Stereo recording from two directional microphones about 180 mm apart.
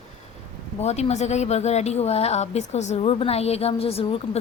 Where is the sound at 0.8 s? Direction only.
35° left (ahead or behind).